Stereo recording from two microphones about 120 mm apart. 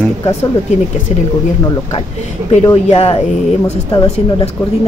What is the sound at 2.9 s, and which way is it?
Speech, 55° left (ahead or behind).